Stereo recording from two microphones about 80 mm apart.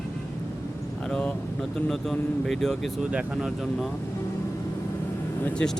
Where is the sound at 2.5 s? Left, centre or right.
Centre.